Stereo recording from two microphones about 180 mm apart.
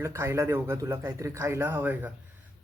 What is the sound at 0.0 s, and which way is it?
Speech, 15° right (ahead or behind).